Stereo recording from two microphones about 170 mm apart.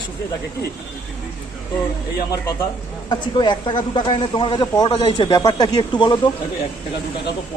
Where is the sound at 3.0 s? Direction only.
25° left (ahead or behind).